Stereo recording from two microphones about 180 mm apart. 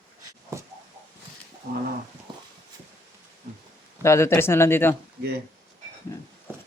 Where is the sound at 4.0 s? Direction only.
15° left (ahead or behind).